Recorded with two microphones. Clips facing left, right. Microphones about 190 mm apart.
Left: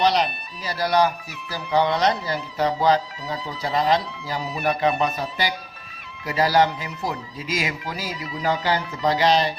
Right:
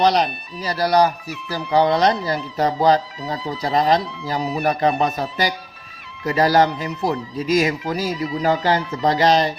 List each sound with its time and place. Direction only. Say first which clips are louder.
0.0 s speech: right 3 dB; 40° right (ahead or behind)